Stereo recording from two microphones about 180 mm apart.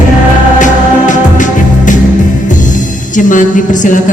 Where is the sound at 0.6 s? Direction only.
45° left (ahead or behind).